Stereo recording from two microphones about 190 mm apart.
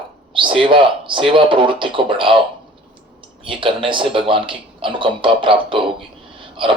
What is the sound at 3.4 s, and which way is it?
Speech, 25° right (ahead or behind).